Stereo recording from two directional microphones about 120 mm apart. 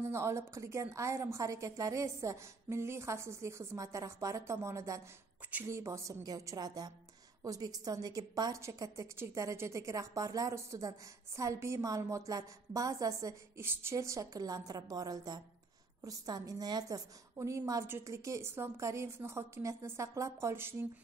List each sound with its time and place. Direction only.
0.0 s a woman's voice: 25° right (ahead or behind)